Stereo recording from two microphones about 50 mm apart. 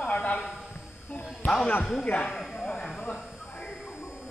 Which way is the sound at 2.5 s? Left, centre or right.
Centre.